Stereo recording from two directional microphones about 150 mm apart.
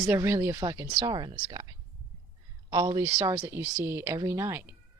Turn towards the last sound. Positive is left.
turn(degrees=-15)  # may be behind; listen again after turning